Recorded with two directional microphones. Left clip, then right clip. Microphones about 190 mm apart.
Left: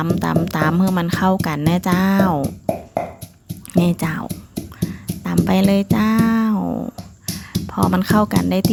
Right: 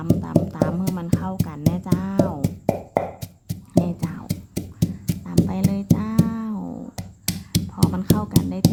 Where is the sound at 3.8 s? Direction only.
25° left (ahead or behind).